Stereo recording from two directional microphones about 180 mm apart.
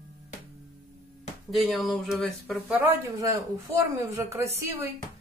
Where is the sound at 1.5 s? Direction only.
Centre (ahead or behind).